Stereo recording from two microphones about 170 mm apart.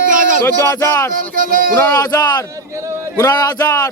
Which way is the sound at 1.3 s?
55° right (ahead or behind).